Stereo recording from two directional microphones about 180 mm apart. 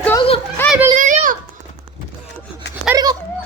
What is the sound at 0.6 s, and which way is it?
Children playing, 15° left (ahead or behind).